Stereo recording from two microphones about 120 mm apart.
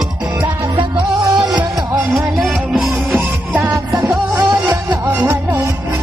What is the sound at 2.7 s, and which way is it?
Music, centre (ahead or behind).